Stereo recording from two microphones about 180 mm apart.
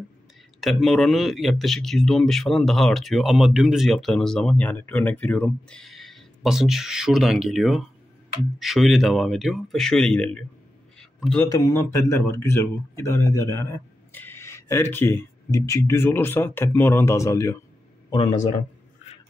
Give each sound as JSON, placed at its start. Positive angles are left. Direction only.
{"t": 0.6, "sound": "a man's voice", "side_deg": 0}
{"t": 11.0, "sound": "a sound", "side_deg": 0}
{"t": 11.8, "sound": "speech", "side_deg": 15}
{"t": 18.1, "sound": "speech", "side_deg": 30}